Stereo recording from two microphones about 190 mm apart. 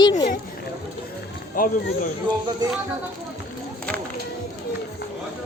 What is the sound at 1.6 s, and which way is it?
Speech, 45° left (ahead or behind).